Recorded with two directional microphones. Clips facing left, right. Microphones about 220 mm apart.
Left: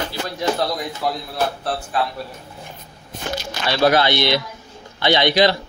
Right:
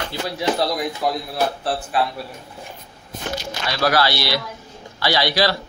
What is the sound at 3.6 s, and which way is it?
Speech, 25° left (ahead or behind).